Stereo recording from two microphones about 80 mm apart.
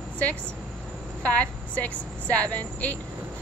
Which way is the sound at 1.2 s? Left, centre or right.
Centre.